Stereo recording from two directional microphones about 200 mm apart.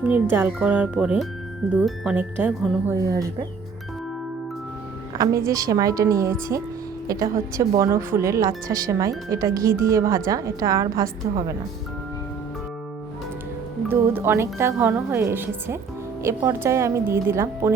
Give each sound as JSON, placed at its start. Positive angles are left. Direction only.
{"t": 0.0, "sound": "speech", "side_deg": -10}
{"t": 5.1, "sound": "a woman's voice", "side_deg": -15}
{"t": 13.8, "sound": "speech", "side_deg": -10}